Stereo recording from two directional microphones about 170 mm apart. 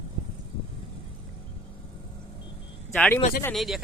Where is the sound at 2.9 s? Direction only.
10° left (ahead or behind).